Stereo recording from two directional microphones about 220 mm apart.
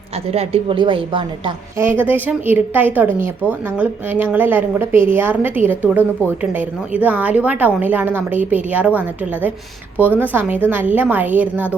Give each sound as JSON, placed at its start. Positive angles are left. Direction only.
{"t": 0.3, "sound": "a woman's voice", "side_deg": -25}
{"t": 1.8, "sound": "a woman's voice", "side_deg": -10}